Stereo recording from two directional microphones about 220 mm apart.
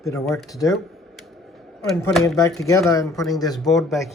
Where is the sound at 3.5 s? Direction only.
Centre (ahead or behind).